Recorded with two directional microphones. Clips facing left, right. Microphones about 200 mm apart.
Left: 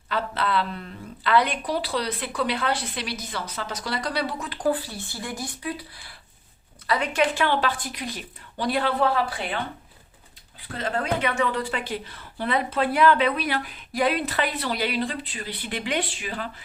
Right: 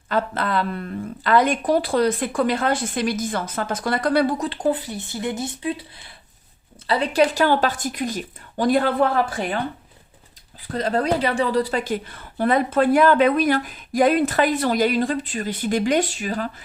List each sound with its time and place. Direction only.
0.1 s a woman's voice: 45° right (ahead or behind)
4.4 s a woman's voice: 25° right (ahead or behind); by 9.6 s 45° right (ahead or behind)
10.7 s a woman's voice: 40° right (ahead or behind)